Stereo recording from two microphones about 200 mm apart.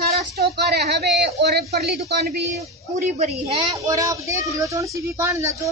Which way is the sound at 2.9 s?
35° right (ahead or behind).